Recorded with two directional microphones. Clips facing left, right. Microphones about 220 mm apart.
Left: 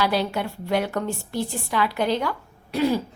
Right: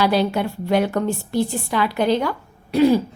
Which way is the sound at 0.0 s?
20° right (ahead or behind).